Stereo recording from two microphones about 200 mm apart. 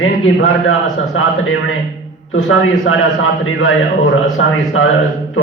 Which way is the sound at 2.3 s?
85° left.